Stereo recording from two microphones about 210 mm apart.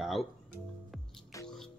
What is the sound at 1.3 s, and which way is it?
Music, 15° left (ahead or behind).